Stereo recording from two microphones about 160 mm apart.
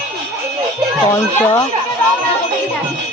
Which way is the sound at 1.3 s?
15° left (ahead or behind).